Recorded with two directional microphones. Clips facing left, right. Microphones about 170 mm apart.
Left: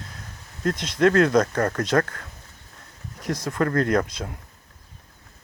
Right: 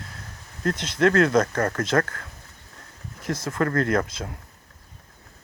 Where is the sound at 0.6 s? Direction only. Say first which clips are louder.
Left 1 dB; 15° left (ahead or behind).